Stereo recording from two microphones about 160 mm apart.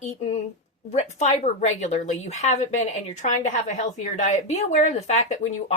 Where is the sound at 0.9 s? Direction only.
45° left (ahead or behind).